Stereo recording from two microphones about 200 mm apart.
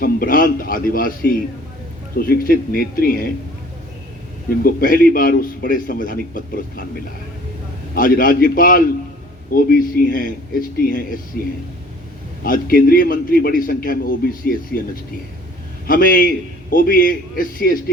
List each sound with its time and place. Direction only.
0.0 s a man's voice: 45° left (ahead or behind)
4.6 s a man's voice: 45° left (ahead or behind)
7.9 s a man's voice: 45° left (ahead or behind)
12.4 s a man's voice: 45° left (ahead or behind)
15.9 s a man's voice: 45° left (ahead or behind)